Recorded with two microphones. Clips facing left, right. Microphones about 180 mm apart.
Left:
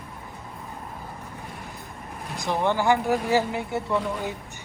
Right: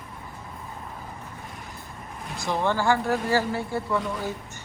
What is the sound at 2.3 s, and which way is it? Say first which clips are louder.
Speech: left 1 dB; 15° left (ahead or behind).